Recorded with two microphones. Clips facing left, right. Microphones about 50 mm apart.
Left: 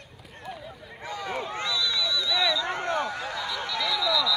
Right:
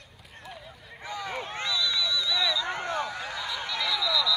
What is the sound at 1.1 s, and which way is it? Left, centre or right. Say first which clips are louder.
Run: left 2 dB; centre.